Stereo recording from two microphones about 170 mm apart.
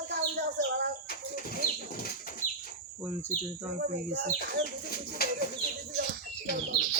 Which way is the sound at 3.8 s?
75° right (ahead or behind).